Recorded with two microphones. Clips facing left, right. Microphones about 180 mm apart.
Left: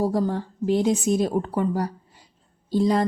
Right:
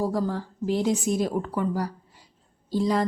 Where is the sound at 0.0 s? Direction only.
25° left (ahead or behind).